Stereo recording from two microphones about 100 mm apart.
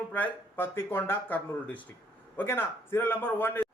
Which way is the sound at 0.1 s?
20° left (ahead or behind).